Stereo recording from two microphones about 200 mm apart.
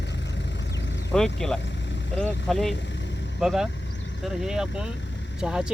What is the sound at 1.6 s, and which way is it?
Vehicle, 60° left (ahead or behind).